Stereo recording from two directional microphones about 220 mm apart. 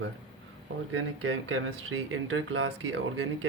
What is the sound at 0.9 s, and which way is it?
Speech, 60° right (ahead or behind).